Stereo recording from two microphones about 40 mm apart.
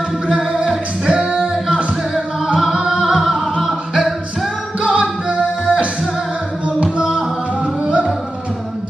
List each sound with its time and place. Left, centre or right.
0.3 s music: right
2.1 s music: centre
4.7 s music: right
7.2 s music: centre